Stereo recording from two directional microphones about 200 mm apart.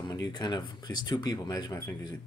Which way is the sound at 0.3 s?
20° left (ahead or behind).